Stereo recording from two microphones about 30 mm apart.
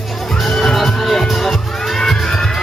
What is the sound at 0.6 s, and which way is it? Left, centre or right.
Music, centre.